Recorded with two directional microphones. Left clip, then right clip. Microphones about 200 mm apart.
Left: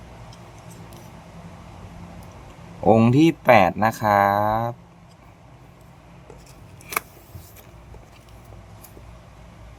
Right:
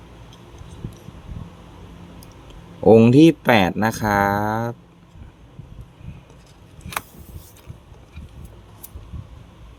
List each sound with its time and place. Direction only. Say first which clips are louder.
2.8 s speech: right 5 dB; 15° right (ahead or behind)